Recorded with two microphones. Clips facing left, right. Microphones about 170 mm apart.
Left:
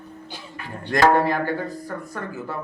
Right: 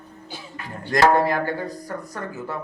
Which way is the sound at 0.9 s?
40° right (ahead or behind).